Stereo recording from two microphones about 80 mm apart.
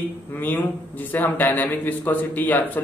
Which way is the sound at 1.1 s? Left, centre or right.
Left.